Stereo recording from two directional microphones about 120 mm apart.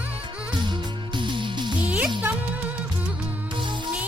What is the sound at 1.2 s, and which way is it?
Music, 40° right (ahead or behind).